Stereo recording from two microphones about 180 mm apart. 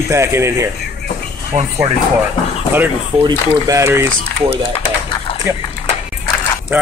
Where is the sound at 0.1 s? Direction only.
15° right (ahead or behind).